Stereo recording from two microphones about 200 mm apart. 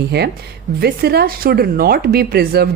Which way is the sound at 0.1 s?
55° right (ahead or behind).